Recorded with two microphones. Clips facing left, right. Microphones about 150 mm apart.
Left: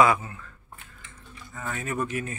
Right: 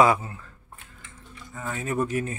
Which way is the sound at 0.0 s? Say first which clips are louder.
Right 1 dB; 30° right (ahead or behind).